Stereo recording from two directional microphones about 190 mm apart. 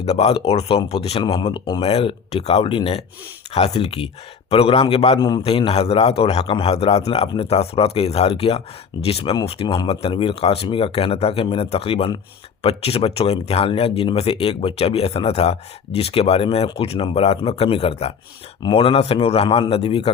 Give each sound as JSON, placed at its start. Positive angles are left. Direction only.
{"t": 0.0, "sound": "a man's voice", "side_deg": 35}